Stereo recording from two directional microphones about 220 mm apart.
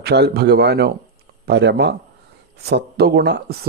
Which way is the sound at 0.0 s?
50° right (ahead or behind).